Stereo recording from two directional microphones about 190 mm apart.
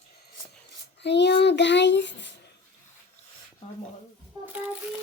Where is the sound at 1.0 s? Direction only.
65° left (ahead or behind).